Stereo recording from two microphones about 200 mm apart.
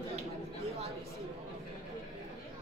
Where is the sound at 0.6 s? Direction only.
30° right (ahead or behind).